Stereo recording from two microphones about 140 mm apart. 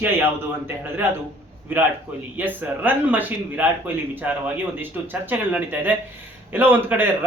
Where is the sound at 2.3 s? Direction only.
15° right (ahead or behind).